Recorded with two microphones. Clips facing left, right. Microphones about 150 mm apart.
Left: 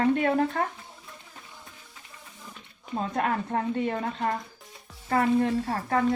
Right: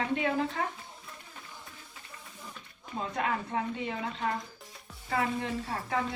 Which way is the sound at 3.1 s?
50° left (ahead or behind).